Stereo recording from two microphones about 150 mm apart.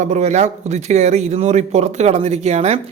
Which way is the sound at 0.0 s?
50° right (ahead or behind).